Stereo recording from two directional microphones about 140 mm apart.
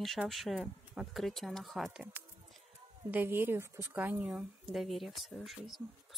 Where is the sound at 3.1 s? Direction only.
15° right (ahead or behind).